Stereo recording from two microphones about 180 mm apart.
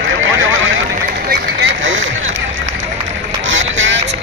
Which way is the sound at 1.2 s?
75° right (ahead or behind).